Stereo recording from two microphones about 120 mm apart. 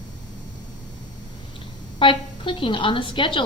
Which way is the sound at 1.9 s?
45° left (ahead or behind).